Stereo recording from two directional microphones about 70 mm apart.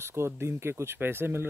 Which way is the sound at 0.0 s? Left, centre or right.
Right.